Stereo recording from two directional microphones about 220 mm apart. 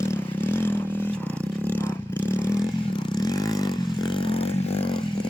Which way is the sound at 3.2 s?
15° left (ahead or behind).